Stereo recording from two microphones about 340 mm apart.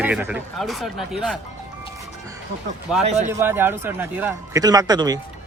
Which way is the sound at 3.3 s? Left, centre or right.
Centre.